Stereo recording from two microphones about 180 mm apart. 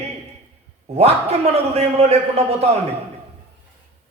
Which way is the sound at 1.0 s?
35° right (ahead or behind).